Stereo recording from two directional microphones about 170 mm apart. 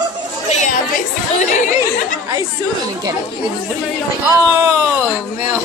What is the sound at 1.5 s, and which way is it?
Speech, 45° left (ahead or behind).